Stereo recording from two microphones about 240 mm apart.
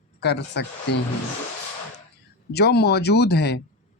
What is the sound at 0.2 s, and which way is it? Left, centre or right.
Speech, left.